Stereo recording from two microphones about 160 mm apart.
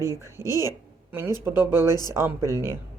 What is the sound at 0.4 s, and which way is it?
Speech, 20° left (ahead or behind).